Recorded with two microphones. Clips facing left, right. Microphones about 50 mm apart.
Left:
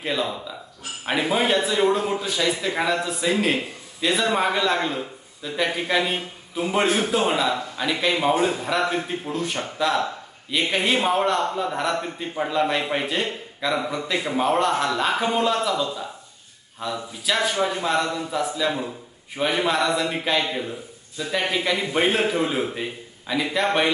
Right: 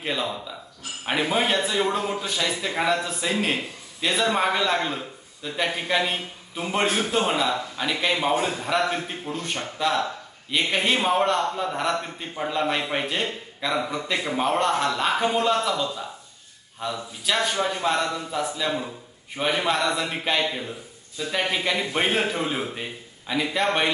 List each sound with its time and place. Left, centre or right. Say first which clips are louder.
0.0 s a man's voice: left 2 dB; centre
7.4 s a man's voice: left 2 dB; centre
8.1 s a man's voice: left 4 dB; centre